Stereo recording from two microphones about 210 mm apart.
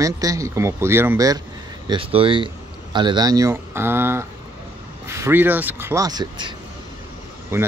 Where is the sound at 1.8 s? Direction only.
25° right (ahead or behind).